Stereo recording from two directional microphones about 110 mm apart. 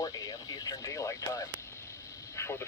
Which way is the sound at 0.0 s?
35° left (ahead or behind).